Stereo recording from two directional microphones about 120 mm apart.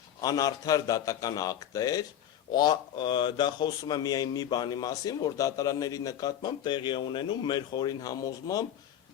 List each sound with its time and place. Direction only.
0.2 s speech: 30° left (ahead or behind)